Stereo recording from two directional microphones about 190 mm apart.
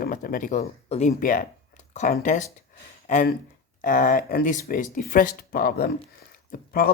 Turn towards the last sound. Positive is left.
turn(degrees=50)  # may be behind; listen again after turning